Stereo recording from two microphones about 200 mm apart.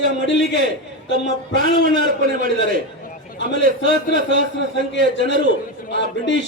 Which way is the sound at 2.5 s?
65° left (ahead or behind).